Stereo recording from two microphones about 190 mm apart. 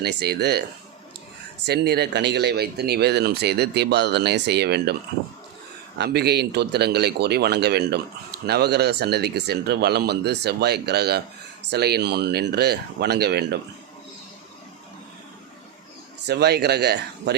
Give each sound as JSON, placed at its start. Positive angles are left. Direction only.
{"t": 0.0, "sound": "speech", "side_deg": -60}
{"t": 1.6, "sound": "speech", "side_deg": -55}
{"t": 6.0, "sound": "speech", "side_deg": -60}
{"t": 16.2, "sound": "speech", "side_deg": -60}